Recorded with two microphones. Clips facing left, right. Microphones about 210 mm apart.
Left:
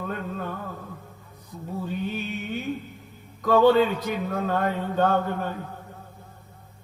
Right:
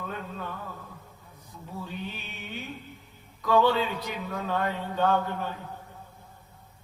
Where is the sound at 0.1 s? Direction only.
45° left (ahead or behind).